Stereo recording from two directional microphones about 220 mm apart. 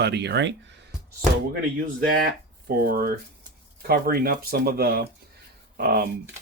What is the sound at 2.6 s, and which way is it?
Speech, 40° right (ahead or behind).